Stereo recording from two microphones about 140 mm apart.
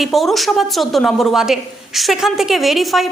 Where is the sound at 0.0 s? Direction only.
Centre (ahead or behind).